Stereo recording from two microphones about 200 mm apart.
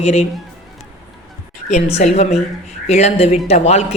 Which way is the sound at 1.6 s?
35° left (ahead or behind).